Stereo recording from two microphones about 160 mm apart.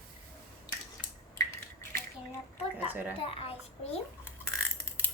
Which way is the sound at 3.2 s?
35° left (ahead or behind).